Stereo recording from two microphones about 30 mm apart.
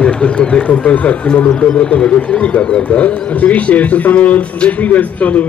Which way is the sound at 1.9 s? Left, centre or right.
Left.